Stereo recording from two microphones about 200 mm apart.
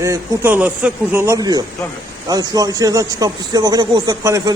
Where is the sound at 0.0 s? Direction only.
10° right (ahead or behind).